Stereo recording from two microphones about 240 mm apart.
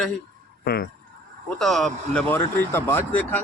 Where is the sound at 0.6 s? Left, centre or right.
Left.